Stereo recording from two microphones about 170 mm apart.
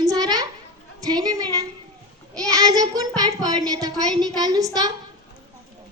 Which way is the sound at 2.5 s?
20° right (ahead or behind).